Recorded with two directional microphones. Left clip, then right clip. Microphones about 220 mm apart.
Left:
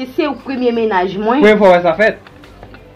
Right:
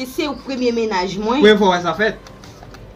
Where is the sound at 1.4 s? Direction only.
20° right (ahead or behind).